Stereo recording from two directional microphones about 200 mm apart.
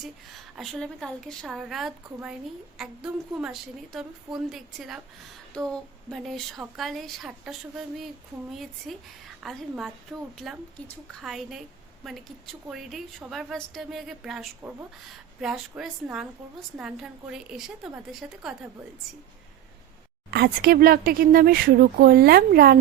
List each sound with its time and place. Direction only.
0.0 s a woman's voice: centre (ahead or behind)
20.3 s speech: 50° right (ahead or behind)